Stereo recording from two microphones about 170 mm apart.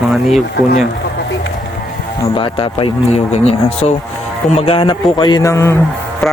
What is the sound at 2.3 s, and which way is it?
Speech, 30° left (ahead or behind).